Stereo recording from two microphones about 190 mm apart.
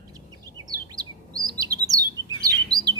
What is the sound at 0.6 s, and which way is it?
Chirp, 20° right (ahead or behind).